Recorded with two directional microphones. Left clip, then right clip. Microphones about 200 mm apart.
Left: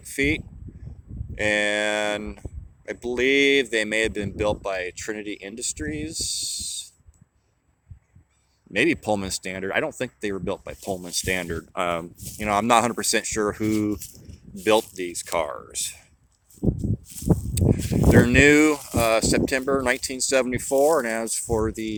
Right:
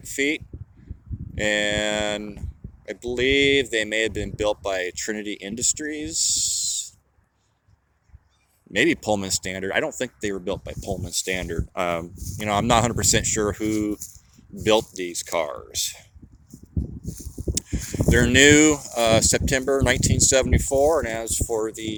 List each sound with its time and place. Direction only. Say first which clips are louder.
0.1 s speech: even; 5° left (ahead or behind)
6.1 s speech: right 5 dB; 55° right (ahead or behind)
8.7 s speech: right 1 dB; centre (ahead or behind)
17.7 s speech: left 4 dB; centre (ahead or behind)